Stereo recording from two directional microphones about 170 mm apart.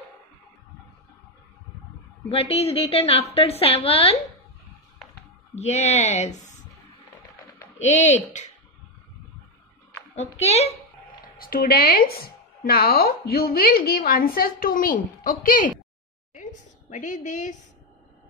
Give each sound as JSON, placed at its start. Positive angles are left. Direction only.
{"t": 2.2, "sound": "a woman's voice", "side_deg": 35}
{"t": 5.5, "sound": "a woman's voice", "side_deg": 40}
{"t": 7.8, "sound": "speech", "side_deg": 40}
{"t": 10.1, "sound": "a woman's voice", "side_deg": 40}
{"t": 11.3, "sound": "speech", "side_deg": 60}
{"t": 16.9, "sound": "speech", "side_deg": 45}